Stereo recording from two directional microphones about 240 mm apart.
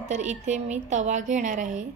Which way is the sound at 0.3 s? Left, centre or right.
Right.